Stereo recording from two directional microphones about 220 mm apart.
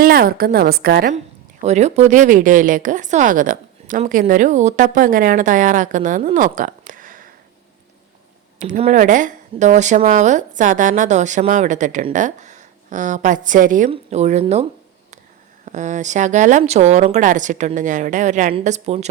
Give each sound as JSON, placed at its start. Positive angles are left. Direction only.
{"t": 0.0, "sound": "a woman's voice", "side_deg": -40}
{"t": 1.6, "sound": "a woman's voice", "side_deg": -30}
{"t": 8.5, "sound": "a woman's voice", "side_deg": -35}